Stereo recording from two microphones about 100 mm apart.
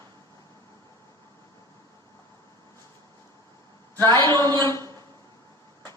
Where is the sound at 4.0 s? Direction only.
25° left (ahead or behind).